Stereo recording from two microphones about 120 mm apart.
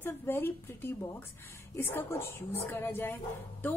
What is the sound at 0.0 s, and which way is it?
A woman's voice, 20° left (ahead or behind).